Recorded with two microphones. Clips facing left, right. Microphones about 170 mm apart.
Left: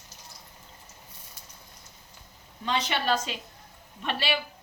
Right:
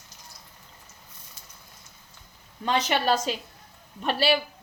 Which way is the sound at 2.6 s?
45° right (ahead or behind).